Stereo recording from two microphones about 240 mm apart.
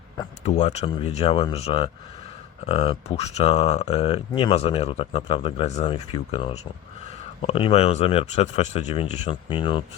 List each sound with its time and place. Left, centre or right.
0.4 s speech: left